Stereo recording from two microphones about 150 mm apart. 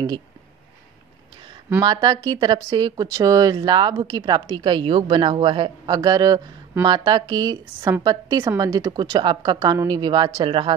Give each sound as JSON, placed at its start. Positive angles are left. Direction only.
{"t": 1.8, "sound": "speech", "side_deg": -30}